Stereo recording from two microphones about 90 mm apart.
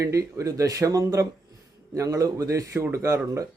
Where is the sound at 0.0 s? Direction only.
35° right (ahead or behind).